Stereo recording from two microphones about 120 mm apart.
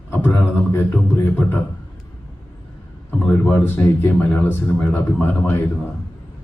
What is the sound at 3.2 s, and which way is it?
Speech, 15° left (ahead or behind).